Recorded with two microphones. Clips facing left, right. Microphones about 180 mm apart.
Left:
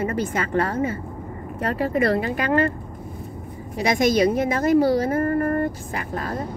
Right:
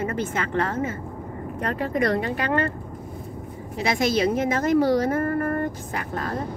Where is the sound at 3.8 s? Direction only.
15° left (ahead or behind).